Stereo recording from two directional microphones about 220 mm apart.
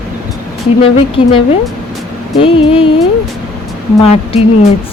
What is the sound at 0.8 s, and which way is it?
Speech, 25° left (ahead or behind).